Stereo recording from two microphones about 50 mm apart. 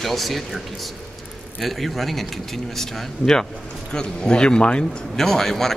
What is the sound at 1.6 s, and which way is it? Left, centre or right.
Speech, centre.